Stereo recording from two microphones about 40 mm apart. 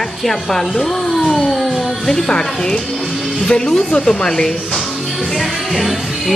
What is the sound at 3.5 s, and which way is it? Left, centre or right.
Speech, left.